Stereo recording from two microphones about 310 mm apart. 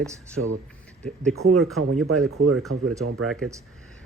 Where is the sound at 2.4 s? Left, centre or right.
Right.